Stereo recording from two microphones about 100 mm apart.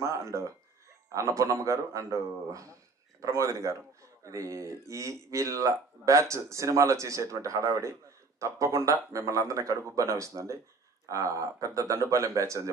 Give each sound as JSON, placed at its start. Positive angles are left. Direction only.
{"t": 0.0, "sound": "speech", "side_deg": -30}